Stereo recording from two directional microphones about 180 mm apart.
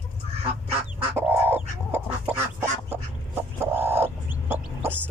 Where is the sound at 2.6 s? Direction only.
10° right (ahead or behind).